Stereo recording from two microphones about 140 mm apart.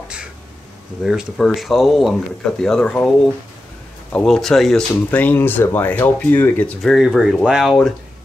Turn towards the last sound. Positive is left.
turn(degrees=0)  # may be behind; listen again after turning